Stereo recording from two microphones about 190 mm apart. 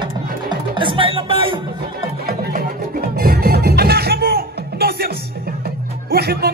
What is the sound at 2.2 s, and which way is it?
Music, 50° right (ahead or behind).